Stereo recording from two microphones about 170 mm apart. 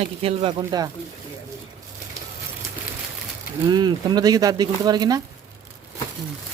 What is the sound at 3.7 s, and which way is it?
Speech, 25° right (ahead or behind).